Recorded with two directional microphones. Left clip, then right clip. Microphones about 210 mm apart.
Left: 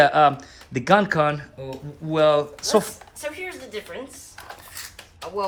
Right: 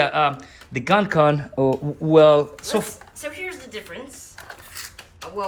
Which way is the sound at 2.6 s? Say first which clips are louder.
Left 4 dB; 15° left (ahead or behind).